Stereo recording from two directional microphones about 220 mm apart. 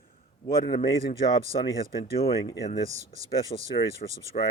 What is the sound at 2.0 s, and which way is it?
Speech, 25° left (ahead or behind).